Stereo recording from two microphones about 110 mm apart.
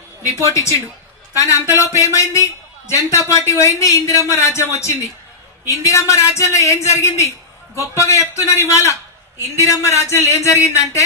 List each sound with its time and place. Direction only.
0.2 s a man's voice: 30° left (ahead or behind)
5.7 s a man's voice: 25° left (ahead or behind)